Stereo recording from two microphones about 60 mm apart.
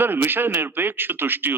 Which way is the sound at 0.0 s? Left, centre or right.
Right.